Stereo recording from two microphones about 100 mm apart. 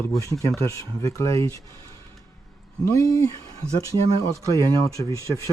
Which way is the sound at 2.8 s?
30° left (ahead or behind).